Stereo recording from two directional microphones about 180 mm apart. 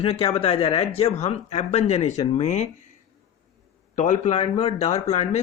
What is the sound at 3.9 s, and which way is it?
Speech, 40° left (ahead or behind).